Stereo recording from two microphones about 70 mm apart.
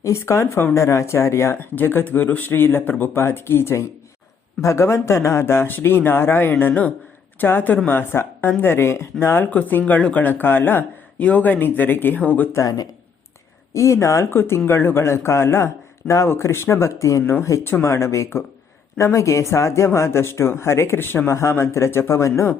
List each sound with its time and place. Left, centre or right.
0.0 s speech: left
12.6 s speech: left
13.7 s speech: left